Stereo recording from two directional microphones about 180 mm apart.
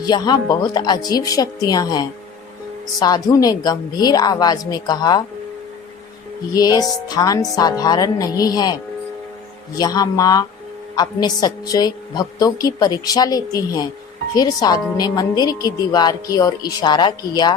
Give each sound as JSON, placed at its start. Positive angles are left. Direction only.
{"t": 0.0, "sound": "a woman's voice", "side_deg": 25}
{"t": 6.5, "sound": "a woman's voice", "side_deg": 20}